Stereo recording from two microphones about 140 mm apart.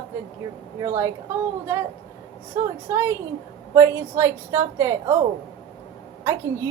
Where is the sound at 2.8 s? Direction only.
20° right (ahead or behind).